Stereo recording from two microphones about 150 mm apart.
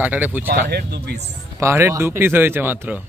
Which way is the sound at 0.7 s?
90° right.